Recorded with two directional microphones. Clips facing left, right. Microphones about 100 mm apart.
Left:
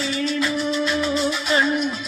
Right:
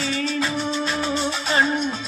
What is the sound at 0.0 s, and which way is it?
Music, 35° right (ahead or behind).